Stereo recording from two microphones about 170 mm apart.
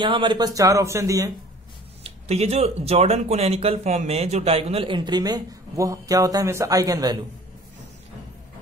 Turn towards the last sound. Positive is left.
turn(degrees=-20)  # may be behind; listen again after turning